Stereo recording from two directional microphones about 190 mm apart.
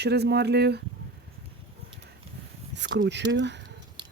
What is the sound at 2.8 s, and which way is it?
Speech, 60° right (ahead or behind).